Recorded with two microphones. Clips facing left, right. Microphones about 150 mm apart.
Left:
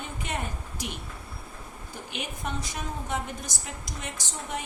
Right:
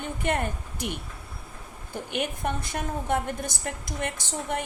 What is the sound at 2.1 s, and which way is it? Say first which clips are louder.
A woman's voice: right 5 dB; 55° right (ahead or behind).